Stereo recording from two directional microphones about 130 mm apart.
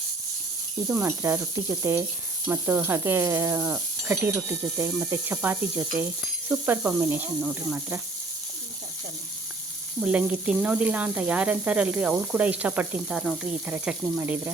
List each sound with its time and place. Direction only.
0.9 s speech: 15° right (ahead or behind)
1.8 s sizzle: 20° right (ahead or behind)
4.9 s speech: 15° right (ahead or behind)
10.0 s speech: 10° right (ahead or behind)